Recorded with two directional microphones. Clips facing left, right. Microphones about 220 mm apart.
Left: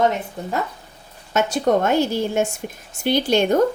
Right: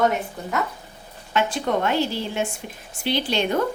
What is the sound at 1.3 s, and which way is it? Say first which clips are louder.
A woman's voice: left 4 dB; 45° left (ahead or behind).